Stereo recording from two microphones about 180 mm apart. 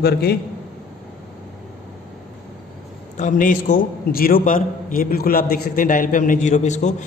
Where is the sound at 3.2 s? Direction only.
45° left (ahead or behind).